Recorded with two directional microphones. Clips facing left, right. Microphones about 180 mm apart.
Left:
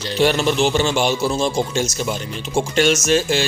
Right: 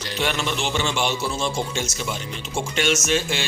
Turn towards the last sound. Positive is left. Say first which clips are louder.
# left 6 dB
turn(degrees=40)  # may be behind; listen again after turning